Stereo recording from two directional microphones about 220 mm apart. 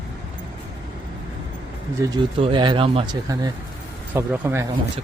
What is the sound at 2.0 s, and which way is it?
Speech, 15° right (ahead or behind).